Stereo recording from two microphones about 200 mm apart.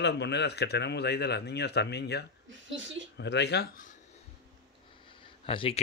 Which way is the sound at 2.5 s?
70° right (ahead or behind).